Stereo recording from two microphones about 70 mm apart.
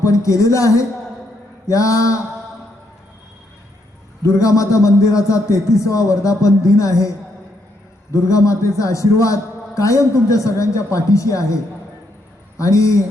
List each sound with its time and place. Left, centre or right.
0.0 s a man's voice: left
4.3 s a man's voice: left
8.1 s a man's voice: left